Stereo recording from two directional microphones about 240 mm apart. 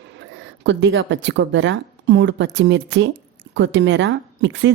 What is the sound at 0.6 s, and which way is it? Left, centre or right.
Speech, right.